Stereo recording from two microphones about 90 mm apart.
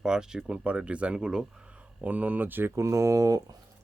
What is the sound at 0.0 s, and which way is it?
Speech, 10° right (ahead or behind).